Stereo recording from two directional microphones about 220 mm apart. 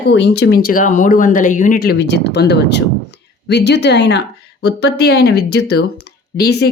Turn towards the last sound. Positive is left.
turn(degrees=50)  # may be behind; listen again after turning